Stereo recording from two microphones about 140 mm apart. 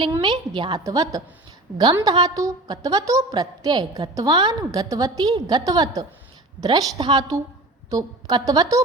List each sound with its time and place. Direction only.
0.2 s a woman's voice: 35° right (ahead or behind)